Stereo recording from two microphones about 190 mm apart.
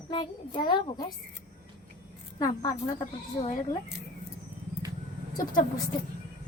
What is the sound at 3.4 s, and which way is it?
Speech, 40° left (ahead or behind).